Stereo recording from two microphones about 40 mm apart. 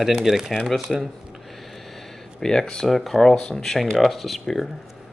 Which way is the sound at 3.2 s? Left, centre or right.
Centre.